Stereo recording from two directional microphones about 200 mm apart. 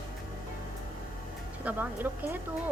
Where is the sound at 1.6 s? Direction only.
10° right (ahead or behind).